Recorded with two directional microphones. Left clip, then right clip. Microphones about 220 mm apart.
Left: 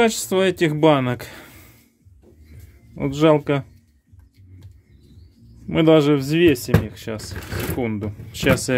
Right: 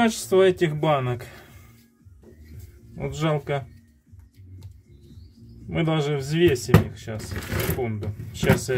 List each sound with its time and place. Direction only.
0.0 s speech: 40° left (ahead or behind)
3.0 s speech: 50° left (ahead or behind)
5.7 s speech: 50° left (ahead or behind)